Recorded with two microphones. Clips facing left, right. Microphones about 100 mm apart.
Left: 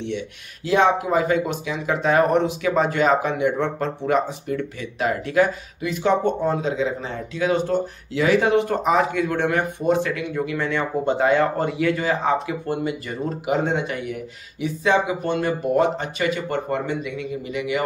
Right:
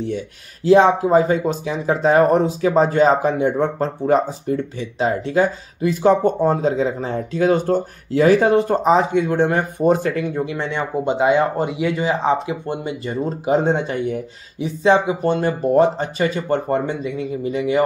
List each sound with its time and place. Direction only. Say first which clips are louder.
0.7 s speech: right 6 dB; 35° right (ahead or behind)